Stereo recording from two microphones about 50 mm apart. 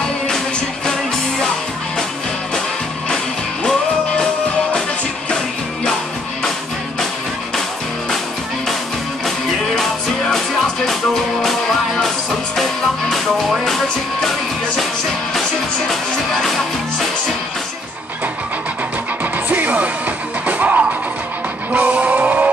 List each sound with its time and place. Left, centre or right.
10.2 s music: centre
15.9 s music: centre
19.3 s music: right
21.7 s vehicle: right